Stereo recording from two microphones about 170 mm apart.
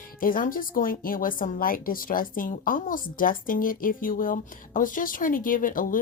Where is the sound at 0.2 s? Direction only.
55° left (ahead or behind).